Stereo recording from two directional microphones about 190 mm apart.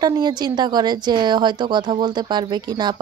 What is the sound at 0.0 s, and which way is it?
Speech, 20° right (ahead or behind).